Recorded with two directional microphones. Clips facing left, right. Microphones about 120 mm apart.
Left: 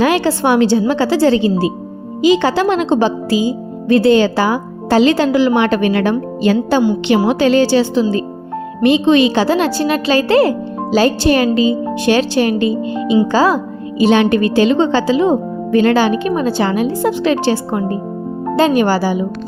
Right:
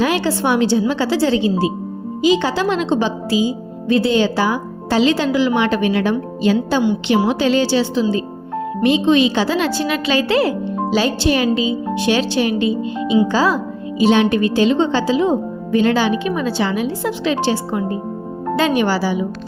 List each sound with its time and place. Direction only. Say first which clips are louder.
0.0 s a woman's voice: left 4 dB; 60° left (ahead or behind)
8.8 s a woman's voice: left 3 dB; 65° left (ahead or behind); by 17.9 s 50° left (ahead or behind)
18.5 s a woman's voice: left 4 dB; 40° left (ahead or behind)